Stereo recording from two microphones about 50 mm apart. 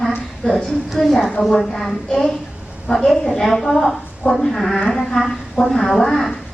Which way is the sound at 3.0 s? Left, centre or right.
Centre.